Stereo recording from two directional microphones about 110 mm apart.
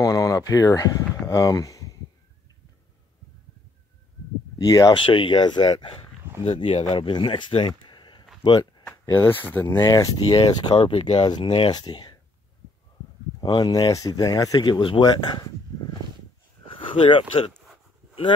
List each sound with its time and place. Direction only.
0.0 s speech: 35° left (ahead or behind)
4.6 s speech: 35° left (ahead or behind)
5.0 s speech: 50° left (ahead or behind)
9.1 s speech: 20° left (ahead or behind)
10.3 s speech: 50° left (ahead or behind)
13.4 s speech: 40° left (ahead or behind)
16.9 s speech: 50° left (ahead or behind)